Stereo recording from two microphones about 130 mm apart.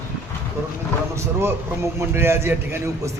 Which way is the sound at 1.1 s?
20° right (ahead or behind).